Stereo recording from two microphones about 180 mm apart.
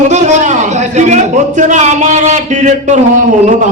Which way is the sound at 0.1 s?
40° right (ahead or behind).